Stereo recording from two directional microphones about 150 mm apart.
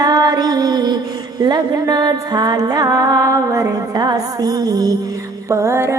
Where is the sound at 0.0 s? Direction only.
25° right (ahead or behind).